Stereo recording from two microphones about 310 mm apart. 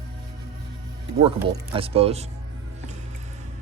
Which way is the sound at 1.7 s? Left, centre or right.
Centre.